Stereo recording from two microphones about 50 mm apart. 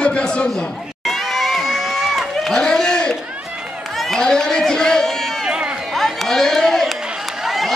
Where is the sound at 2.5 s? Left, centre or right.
Centre.